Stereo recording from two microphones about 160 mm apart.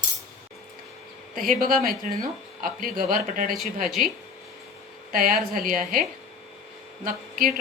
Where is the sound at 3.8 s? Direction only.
Centre (ahead or behind).